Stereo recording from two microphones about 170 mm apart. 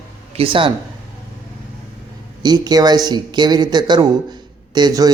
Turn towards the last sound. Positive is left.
turn(degrees=-20)  # may be behind; listen again after turning